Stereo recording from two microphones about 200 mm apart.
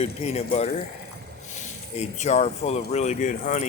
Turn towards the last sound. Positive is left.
turn(degrees=40)  # may be behind; listen again after turning